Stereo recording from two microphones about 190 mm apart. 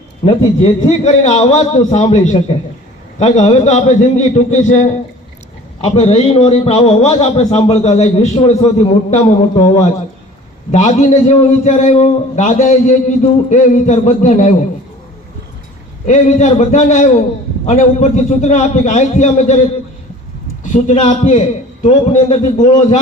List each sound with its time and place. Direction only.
0.2 s a man's voice: 30° left (ahead or behind)
10.7 s a man's voice: 35° left (ahead or behind)
16.0 s a man's voice: 40° left (ahead or behind)
20.7 s a man's voice: 40° left (ahead or behind)